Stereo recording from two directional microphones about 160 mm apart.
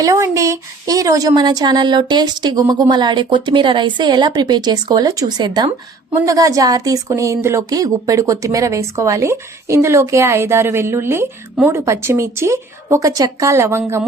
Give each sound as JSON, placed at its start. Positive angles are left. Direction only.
{"t": 0.0, "sound": "a woman's voice", "side_deg": -20}